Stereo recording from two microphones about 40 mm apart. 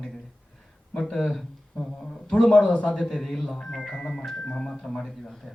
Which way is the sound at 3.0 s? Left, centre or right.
Centre.